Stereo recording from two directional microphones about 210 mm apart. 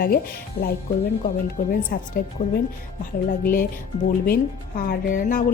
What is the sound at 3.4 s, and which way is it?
A woman's voice, 40° left (ahead or behind).